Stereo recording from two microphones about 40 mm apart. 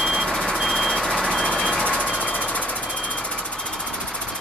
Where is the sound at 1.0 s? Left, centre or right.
Centre; by 2.0 s left.